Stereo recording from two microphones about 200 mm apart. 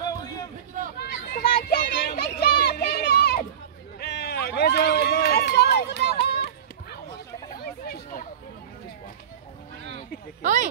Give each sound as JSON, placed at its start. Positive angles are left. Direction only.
{"t": 1.3, "sound": "children playing", "side_deg": 50}
{"t": 4.0, "sound": "run", "side_deg": 50}
{"t": 7.6, "sound": "chatter", "side_deg": 45}
{"t": 10.4, "sound": "a sound", "side_deg": -40}